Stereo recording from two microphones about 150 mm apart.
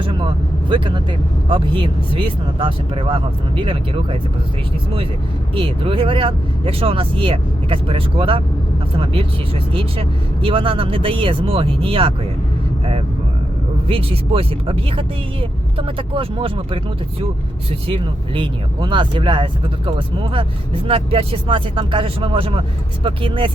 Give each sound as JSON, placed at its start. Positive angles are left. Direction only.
{"t": 0.0, "sound": "speech", "side_deg": -35}
{"t": 5.5, "sound": "speech", "side_deg": -35}
{"t": 9.7, "sound": "speech", "side_deg": -35}
{"t": 13.8, "sound": "speech", "side_deg": -40}